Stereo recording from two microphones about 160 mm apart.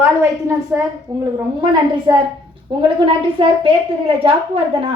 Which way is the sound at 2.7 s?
30° right (ahead or behind).